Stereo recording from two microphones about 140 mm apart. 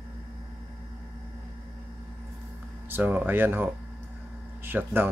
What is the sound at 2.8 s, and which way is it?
Speech, 15° right (ahead or behind).